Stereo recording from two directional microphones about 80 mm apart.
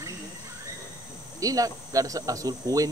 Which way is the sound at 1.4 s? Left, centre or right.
Right.